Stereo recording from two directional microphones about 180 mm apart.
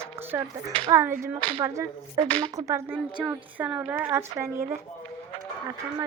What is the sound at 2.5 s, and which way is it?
A woman's voice, 15° right (ahead or behind).